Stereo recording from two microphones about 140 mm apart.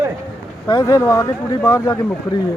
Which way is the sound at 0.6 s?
30° left (ahead or behind).